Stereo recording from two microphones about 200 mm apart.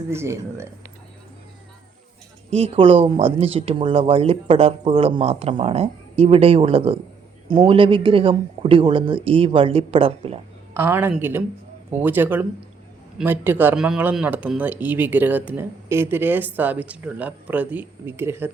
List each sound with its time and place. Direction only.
0.1 s speech: 15° right (ahead or behind)
2.5 s speech: 30° right (ahead or behind)
10.8 s speech: 10° right (ahead or behind)